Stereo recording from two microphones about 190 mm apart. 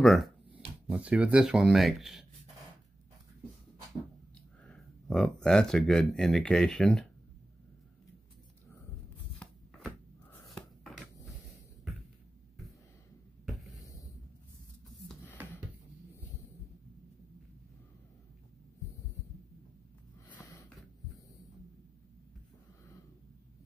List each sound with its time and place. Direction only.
0.0 s speech: centre (ahead or behind)
4.6 s speech: 5° left (ahead or behind)
9.4 s a sound: 5° left (ahead or behind)
20.3 s snort: 15° left (ahead or behind)